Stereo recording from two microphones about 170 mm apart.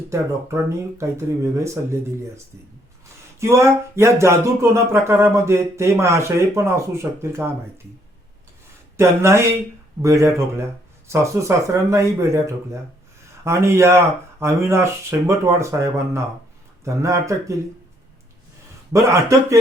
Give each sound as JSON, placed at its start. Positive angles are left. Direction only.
{"t": 0.1, "sound": "speech", "side_deg": -15}
{"t": 3.4, "sound": "speech", "side_deg": -15}
{"t": 9.0, "sound": "speech", "side_deg": -15}
{"t": 18.9, "sound": "speech", "side_deg": -15}